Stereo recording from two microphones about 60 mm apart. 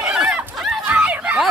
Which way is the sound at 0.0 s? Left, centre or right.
Centre.